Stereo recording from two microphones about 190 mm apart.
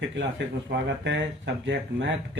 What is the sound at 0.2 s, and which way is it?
Speech, 70° right (ahead or behind).